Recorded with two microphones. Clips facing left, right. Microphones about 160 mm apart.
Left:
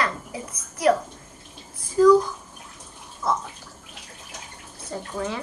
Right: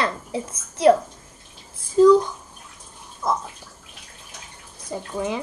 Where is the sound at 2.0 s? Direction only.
25° right (ahead or behind).